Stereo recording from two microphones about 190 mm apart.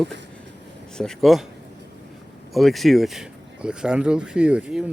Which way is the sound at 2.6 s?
Centre (ahead or behind).